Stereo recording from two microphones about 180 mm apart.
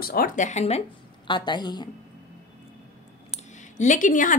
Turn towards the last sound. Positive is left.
turn(degrees=45)  # may be behind; listen again after turning